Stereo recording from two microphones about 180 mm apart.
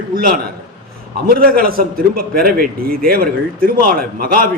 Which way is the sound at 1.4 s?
55° right (ahead or behind).